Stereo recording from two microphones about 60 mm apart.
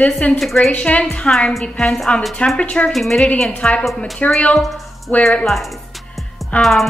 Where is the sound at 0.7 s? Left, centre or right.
Centre.